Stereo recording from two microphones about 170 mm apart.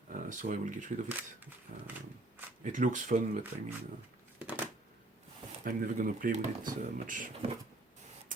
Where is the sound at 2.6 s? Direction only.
50° right (ahead or behind).